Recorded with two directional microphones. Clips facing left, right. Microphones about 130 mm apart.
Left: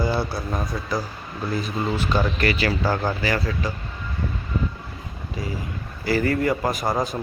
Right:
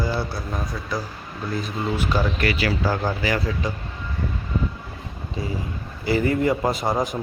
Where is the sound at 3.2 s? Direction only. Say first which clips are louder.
Even; 15° right (ahead or behind).